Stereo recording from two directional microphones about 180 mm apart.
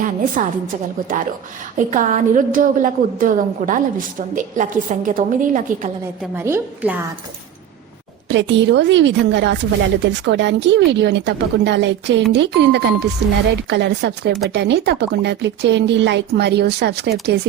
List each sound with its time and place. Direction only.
0.4 s a woman's voice: 40° right (ahead or behind)
6.3 s a woman's voice: 10° right (ahead or behind)
8.3 s a woman's voice: 90° right; by 17.4 s 65° right (ahead or behind)